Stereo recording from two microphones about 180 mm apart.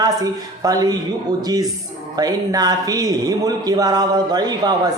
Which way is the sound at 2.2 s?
20° right (ahead or behind).